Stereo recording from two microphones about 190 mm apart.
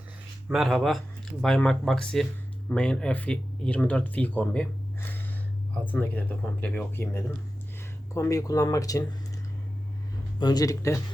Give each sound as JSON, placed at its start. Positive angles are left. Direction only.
{"t": 0.4, "sound": "speech", "side_deg": 0}
{"t": 10.4, "sound": "speech", "side_deg": 20}